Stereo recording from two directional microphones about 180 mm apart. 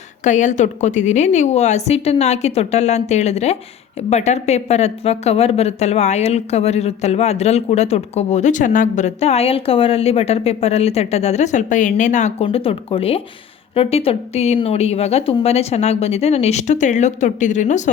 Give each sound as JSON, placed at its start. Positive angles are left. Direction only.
{"t": 0.3, "sound": "a woman's voice", "side_deg": 45}